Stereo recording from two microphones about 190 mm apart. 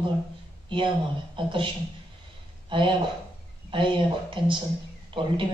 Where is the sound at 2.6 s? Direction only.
25° right (ahead or behind).